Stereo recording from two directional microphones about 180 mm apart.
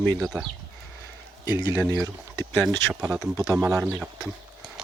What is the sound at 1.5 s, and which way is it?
Speech, 25° left (ahead or behind).